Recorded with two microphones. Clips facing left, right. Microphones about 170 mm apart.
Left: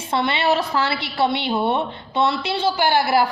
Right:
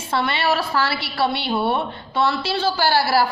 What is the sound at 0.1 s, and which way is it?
A woman's voice, 20° left (ahead or behind).